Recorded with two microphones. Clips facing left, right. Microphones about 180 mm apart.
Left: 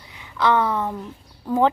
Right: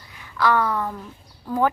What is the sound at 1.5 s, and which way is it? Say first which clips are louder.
Speech: left 3 dB; 20° left (ahead or behind).